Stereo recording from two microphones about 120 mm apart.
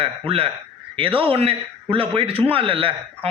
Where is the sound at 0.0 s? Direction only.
50° right (ahead or behind).